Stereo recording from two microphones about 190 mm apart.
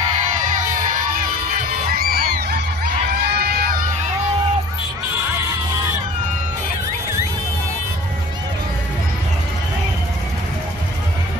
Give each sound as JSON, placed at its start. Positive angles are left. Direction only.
{"t": 2.0, "sound": "crowd", "side_deg": -50}